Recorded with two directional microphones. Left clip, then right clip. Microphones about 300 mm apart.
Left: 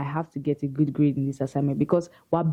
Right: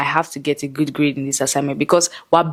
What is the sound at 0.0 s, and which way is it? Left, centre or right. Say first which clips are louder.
Speech: right 12 dB; centre.